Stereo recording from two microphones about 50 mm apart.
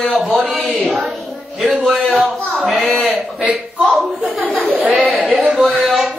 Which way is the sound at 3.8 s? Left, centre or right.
Centre.